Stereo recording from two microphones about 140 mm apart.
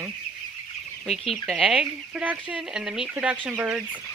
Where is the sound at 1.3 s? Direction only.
Centre (ahead or behind).